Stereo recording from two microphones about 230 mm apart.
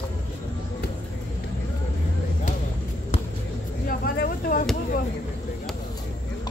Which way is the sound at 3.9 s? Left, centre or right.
Left.